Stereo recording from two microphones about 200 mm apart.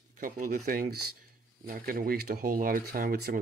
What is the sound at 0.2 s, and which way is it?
Speech, 45° right (ahead or behind).